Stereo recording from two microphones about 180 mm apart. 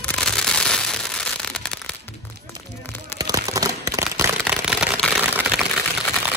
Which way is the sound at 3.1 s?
20° right (ahead or behind).